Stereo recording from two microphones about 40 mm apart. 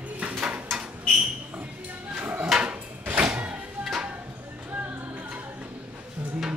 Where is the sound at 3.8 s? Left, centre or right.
Centre.